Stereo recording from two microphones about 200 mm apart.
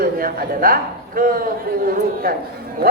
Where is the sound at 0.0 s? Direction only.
45° right (ahead or behind).